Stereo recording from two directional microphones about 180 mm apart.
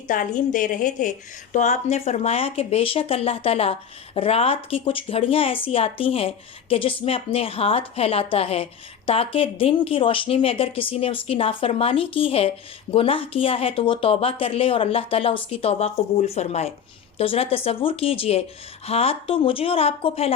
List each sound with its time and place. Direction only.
0.1 s a woman's voice: 45° left (ahead or behind)